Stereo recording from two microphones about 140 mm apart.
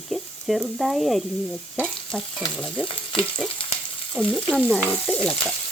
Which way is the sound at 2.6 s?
5° left (ahead or behind).